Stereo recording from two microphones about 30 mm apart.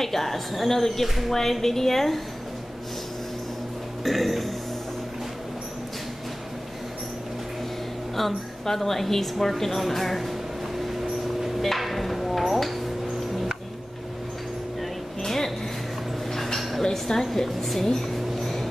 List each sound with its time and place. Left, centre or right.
0.0 s a woman's voice: centre
1.0 s speech: centre
1.3 s a woman's voice: centre
4.0 s speech: centre
8.2 s a woman's voice: centre
14.8 s vehicle: centre
16.5 s dishes: centre
16.8 s speech: centre
17.2 s a woman's voice: centre
18.1 s a sound: centre